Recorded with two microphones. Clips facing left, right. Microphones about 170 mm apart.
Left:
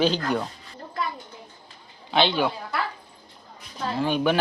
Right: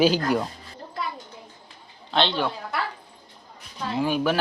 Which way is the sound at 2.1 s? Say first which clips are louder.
Left 2 dB; 5° left (ahead or behind).